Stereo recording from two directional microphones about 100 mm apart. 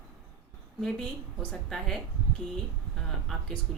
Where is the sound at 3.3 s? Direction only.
5° left (ahead or behind).